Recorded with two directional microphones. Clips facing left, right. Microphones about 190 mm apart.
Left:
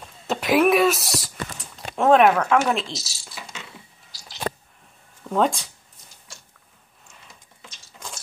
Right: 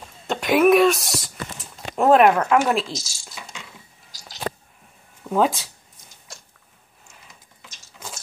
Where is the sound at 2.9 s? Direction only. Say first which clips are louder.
Right 2 dB; 45° right (ahead or behind).